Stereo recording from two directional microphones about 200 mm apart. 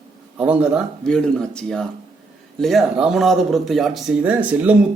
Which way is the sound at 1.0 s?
5° left (ahead or behind).